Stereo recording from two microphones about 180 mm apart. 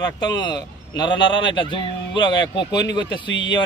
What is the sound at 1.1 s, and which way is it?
Speech, 85° left.